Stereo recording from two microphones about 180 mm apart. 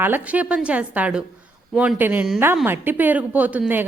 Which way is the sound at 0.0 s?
10° right (ahead or behind).